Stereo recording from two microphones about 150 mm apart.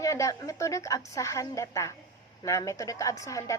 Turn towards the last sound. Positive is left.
turn(degrees=20)  # may be behind; listen again after turning